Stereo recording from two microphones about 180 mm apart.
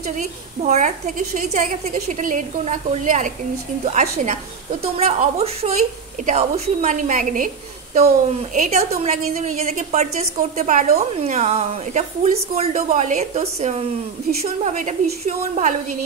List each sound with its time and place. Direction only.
0.6 s a woman's voice: 40° right (ahead or behind)